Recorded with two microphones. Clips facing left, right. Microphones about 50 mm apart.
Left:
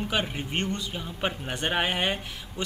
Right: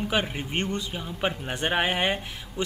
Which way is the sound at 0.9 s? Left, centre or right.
Centre.